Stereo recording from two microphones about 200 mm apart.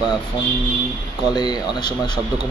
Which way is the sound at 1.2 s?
20° left (ahead or behind).